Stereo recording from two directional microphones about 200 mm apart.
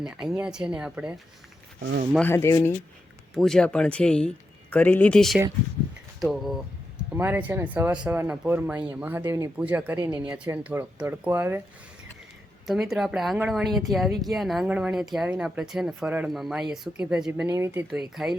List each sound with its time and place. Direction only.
0.0 s speech: 5° right (ahead or behind)
1.8 s speech: 60° right (ahead or behind)
2.1 s speech: 10° left (ahead or behind); by 11.6 s 10° right (ahead or behind)
12.6 s speech: centre (ahead or behind)